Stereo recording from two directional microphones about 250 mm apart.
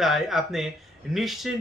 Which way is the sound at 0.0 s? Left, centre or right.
Centre.